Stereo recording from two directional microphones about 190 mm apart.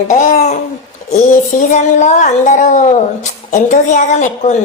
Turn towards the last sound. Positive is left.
turn(degrees=40)  # may be behind; listen again after turning